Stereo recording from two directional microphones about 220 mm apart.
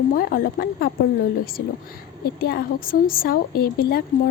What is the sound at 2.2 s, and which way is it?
A woman's voice, 45° left (ahead or behind).